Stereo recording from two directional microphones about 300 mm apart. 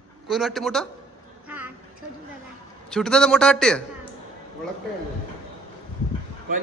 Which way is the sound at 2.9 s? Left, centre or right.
Centre.